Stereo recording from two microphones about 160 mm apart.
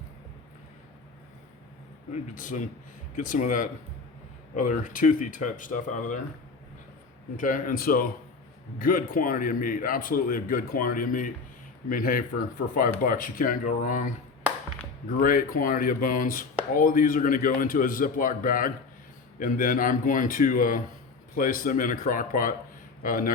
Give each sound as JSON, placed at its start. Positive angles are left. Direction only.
{"t": 2.3, "sound": "a man's voice", "side_deg": 55}
{"t": 7.3, "sound": "a man's voice", "side_deg": 55}
{"t": 15.2, "sound": "a man's voice", "side_deg": 60}